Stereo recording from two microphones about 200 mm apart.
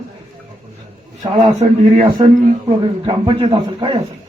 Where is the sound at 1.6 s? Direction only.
30° right (ahead or behind).